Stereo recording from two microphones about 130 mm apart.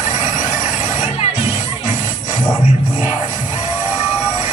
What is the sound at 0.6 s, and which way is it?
Music, 55° left (ahead or behind).